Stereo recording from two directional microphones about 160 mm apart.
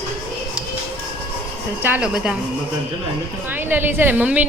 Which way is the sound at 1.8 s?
10° right (ahead or behind).